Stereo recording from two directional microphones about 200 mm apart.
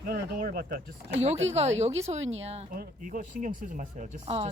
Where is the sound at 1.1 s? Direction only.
35° right (ahead or behind).